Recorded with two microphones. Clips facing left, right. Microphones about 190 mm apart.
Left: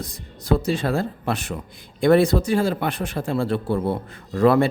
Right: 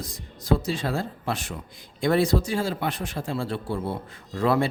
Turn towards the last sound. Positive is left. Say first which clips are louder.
# left 6 dB
turn(degrees=55)  # may be behind; listen again after turning